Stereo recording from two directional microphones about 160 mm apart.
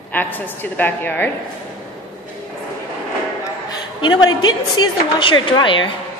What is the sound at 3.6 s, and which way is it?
A woman's voice, 30° left (ahead or behind).